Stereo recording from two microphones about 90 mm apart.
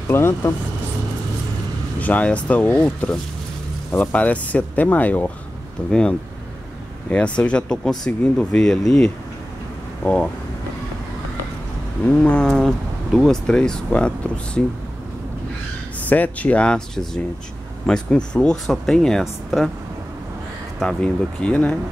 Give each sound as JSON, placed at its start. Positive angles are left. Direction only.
{"t": 0.1, "sound": "speech", "side_deg": 25}
{"t": 2.0, "sound": "speech", "side_deg": 15}
{"t": 12.0, "sound": "speech", "side_deg": 10}
{"t": 16.1, "sound": "speech", "side_deg": 15}
{"t": 20.8, "sound": "speech", "side_deg": 10}